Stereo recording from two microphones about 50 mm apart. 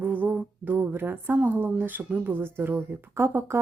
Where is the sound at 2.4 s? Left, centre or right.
Right.